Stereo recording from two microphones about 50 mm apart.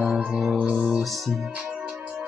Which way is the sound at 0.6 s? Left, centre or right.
Centre.